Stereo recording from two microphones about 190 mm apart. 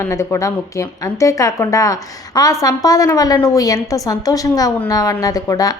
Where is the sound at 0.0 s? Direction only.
15° left (ahead or behind).